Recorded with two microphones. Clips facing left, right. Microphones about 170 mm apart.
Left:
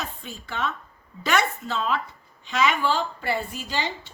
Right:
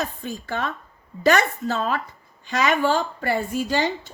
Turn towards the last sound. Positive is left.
turn(degrees=-45)  # may be behind; listen again after turning